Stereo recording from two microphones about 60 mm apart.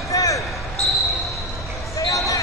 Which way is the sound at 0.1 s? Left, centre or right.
Left.